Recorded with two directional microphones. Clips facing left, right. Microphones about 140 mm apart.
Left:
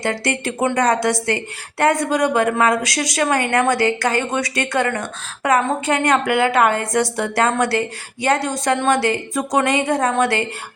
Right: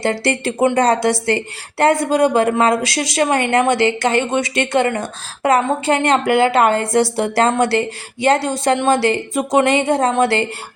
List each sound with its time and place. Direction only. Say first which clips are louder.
0.0 s a woman's voice: right 3 dB; 30° right (ahead or behind)